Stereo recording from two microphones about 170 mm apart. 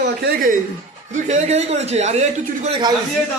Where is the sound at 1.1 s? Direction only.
40° right (ahead or behind).